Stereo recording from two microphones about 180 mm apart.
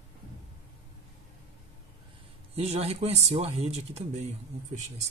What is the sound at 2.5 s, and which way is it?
Speech, 35° right (ahead or behind).